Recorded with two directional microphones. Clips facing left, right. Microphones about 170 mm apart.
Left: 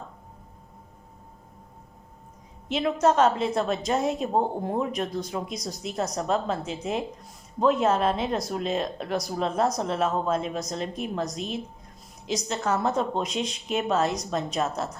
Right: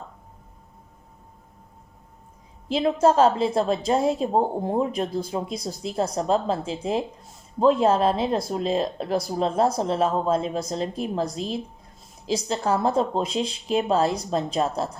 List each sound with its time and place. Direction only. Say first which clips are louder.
2.6 s a woman's voice: right 3 dB; 30° right (ahead or behind)